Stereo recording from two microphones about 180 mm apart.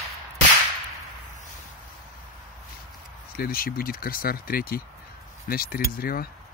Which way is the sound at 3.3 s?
55° left (ahead or behind).